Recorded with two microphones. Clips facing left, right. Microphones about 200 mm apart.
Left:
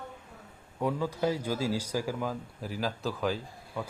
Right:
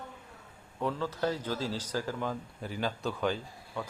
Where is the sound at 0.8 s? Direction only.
10° left (ahead or behind).